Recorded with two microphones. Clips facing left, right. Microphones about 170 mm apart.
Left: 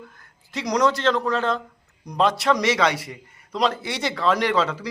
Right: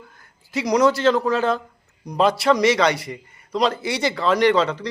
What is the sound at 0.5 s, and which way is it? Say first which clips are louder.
A man's voice: right 4 dB; 5° right (ahead or behind).